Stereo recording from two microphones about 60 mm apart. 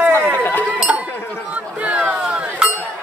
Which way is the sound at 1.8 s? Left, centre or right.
Right.